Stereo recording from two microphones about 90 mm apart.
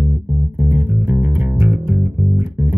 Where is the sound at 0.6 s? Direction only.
20° right (ahead or behind).